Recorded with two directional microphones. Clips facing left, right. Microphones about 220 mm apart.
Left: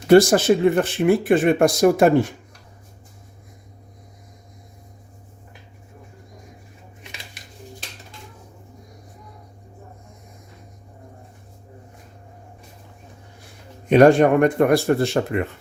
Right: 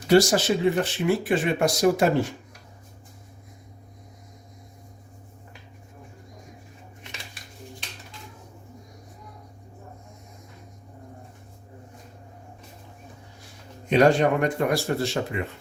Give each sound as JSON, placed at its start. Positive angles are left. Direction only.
{"t": 0.1, "sound": "speech", "side_deg": 55}
{"t": 13.9, "sound": "speech", "side_deg": 55}